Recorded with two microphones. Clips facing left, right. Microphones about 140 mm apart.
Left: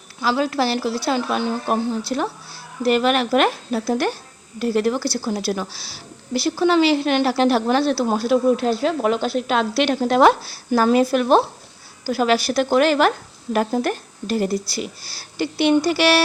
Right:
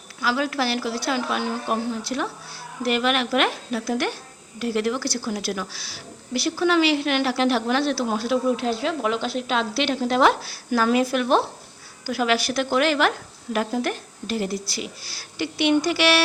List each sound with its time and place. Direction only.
0.2 s a woman's voice: 30° left (ahead or behind)
10.4 s a woman's voice: 30° left (ahead or behind)